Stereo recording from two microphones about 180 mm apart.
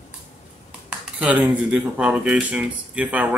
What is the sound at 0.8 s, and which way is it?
Speech, 5° right (ahead or behind).